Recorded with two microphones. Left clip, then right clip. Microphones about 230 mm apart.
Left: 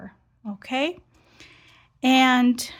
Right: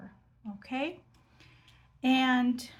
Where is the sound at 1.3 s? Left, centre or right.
Left.